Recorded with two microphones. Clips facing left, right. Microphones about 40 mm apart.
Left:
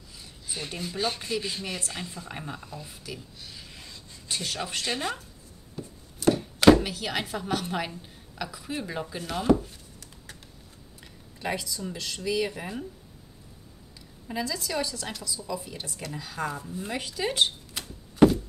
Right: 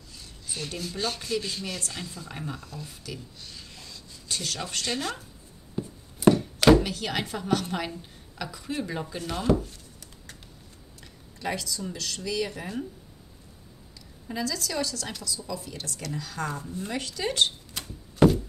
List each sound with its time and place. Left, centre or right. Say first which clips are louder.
0.2 s speech: even; centre
3.8 s a sound: even; centre
5.8 s a sound: right 5 dB; centre
6.3 s speech: left 5 dB; centre
11.4 s speech: even; centre
14.2 s speech: even; centre